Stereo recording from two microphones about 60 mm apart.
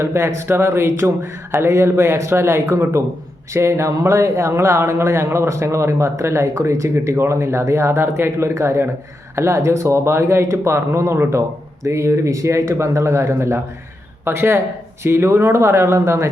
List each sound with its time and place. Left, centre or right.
0.0 s speech: right